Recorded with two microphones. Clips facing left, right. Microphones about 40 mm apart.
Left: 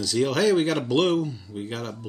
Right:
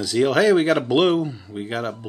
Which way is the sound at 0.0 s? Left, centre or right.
Centre.